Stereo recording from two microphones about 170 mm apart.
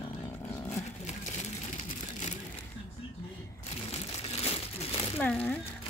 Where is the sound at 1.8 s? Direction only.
45° left (ahead or behind).